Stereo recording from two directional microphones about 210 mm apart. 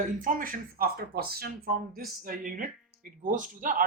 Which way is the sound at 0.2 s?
40° right (ahead or behind).